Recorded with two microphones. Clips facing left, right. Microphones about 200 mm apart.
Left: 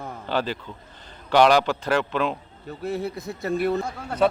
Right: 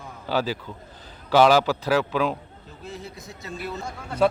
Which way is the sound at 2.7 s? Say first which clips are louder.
Left 10 dB; 65° left (ahead or behind).